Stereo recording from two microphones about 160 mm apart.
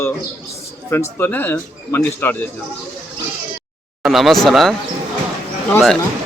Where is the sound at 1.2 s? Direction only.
10° left (ahead or behind).